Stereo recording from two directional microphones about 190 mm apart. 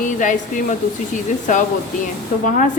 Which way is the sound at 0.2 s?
40° left (ahead or behind).